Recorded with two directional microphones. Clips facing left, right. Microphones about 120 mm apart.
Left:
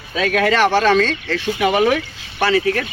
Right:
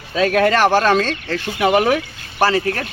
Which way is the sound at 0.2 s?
40° right (ahead or behind).